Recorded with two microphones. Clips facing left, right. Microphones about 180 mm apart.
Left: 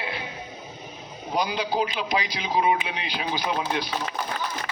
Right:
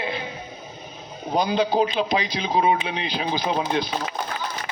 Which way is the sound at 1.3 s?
25° right (ahead or behind).